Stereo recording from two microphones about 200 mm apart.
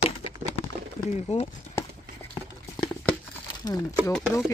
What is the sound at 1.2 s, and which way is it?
Speech, 30° left (ahead or behind).